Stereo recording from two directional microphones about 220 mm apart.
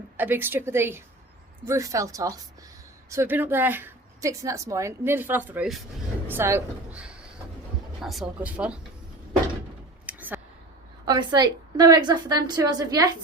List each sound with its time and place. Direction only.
0.2 s a woman's voice: 10° right (ahead or behind)
10.1 s a sound: 5° right (ahead or behind)
11.0 s a woman's voice: 20° right (ahead or behind)